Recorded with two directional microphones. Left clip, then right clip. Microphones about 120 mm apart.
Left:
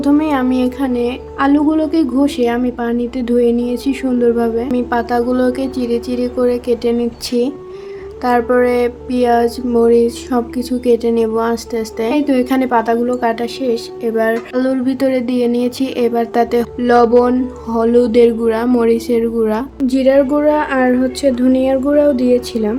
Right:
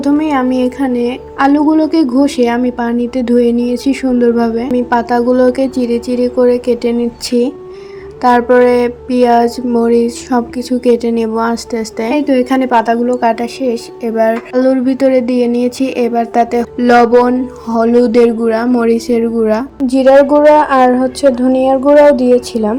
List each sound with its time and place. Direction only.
0.0 s a woman's voice: 15° right (ahead or behind)
12.2 s a woman's voice: 20° right (ahead or behind)
16.7 s a woman's voice: 30° right (ahead or behind)